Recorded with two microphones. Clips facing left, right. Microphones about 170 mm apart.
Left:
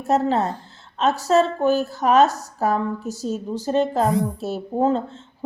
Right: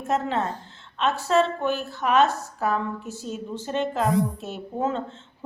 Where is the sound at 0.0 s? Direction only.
35° left (ahead or behind).